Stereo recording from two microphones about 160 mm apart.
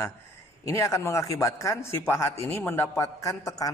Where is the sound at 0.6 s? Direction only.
20° left (ahead or behind).